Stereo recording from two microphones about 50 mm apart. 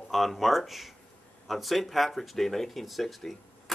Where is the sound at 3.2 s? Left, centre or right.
Centre.